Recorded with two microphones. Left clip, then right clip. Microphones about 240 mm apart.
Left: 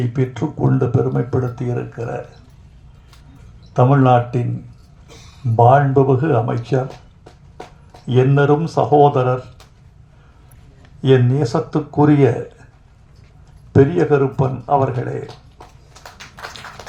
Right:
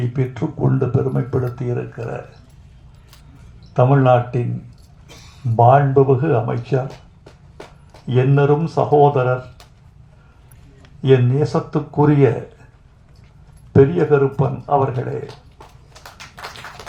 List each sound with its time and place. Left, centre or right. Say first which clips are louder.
0.1 s speech: left 2 dB; left
3.8 s speech: left 1 dB; left
5.5 s speech: even; left
8.0 s speech: left 2 dB; left
11.0 s speech: even; left
13.7 s speech: even; left